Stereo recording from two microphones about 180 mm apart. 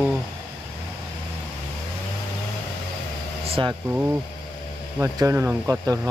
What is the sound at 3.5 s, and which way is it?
Vehicle, 30° right (ahead or behind).